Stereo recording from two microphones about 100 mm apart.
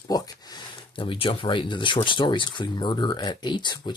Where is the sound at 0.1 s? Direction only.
50° left (ahead or behind).